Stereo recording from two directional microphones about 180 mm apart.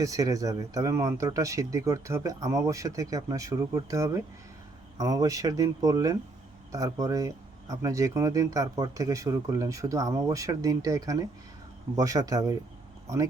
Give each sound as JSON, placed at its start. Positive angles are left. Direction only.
{"t": 0.0, "sound": "speech", "side_deg": -20}